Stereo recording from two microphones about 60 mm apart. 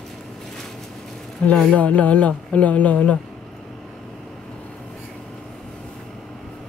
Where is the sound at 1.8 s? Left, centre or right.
Left.